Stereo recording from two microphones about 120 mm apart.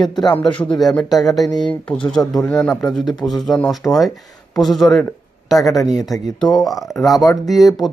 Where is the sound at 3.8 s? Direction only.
15° left (ahead or behind).